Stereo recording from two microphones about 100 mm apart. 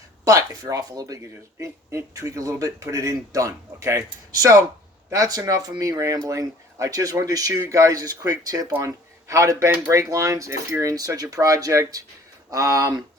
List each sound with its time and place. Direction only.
0.3 s speech: 30° right (ahead or behind)